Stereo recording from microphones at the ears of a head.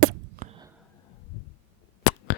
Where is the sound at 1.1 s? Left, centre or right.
Left.